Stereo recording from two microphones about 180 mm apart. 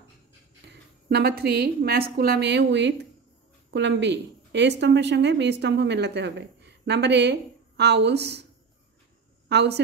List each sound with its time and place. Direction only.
0.7 s a woman's voice: 65° right (ahead or behind)
9.5 s a woman's voice: 70° right (ahead or behind)